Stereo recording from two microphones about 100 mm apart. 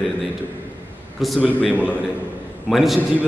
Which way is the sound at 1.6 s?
15° right (ahead or behind).